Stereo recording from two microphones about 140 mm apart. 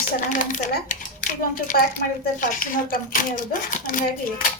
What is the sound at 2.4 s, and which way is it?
A child's voice, 75° left (ahead or behind).